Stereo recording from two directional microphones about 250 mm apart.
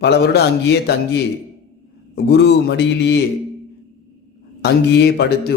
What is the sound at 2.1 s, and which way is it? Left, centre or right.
A man's voice, left.